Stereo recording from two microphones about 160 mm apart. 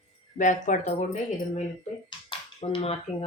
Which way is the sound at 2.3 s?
35° left (ahead or behind).